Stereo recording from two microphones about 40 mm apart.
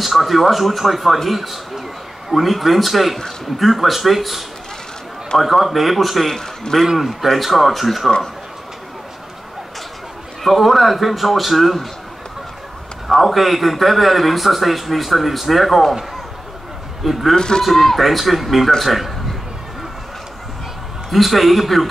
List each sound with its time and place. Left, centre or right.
0.0 s speech: centre
6.9 s speech: centre
10.4 s speech: centre
13.1 s speech: centre
17.0 s speech: centre
17.4 s speech: centre
17.6 s speech: centre
21.1 s a man's voice: centre